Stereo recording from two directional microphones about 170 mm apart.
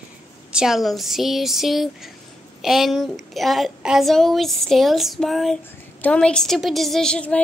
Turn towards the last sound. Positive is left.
turn(degrees=5)  # may be behind; listen again after turning